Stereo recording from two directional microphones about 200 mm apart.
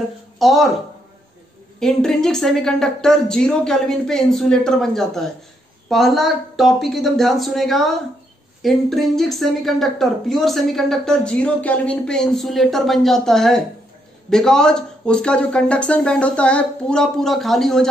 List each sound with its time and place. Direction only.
0.4 s speech: centre (ahead or behind)
1.8 s speech: centre (ahead or behind)